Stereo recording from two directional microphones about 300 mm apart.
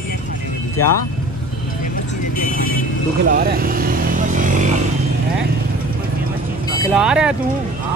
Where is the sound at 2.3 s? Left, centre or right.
Left.